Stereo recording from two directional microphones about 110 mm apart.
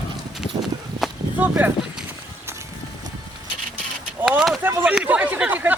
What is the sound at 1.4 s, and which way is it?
Speech, 15° right (ahead or behind).